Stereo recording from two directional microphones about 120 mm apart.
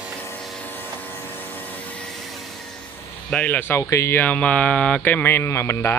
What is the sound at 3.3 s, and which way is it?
Speech, 15° left (ahead or behind).